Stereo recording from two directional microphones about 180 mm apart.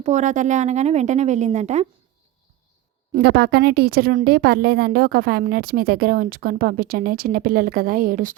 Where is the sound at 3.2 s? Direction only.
60° right (ahead or behind).